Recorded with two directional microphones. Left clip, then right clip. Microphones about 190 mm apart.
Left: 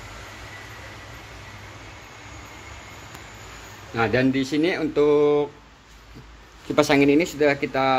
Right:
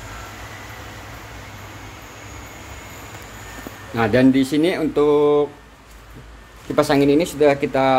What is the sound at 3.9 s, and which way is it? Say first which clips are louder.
Speech: right 5 dB; 5° right (ahead or behind).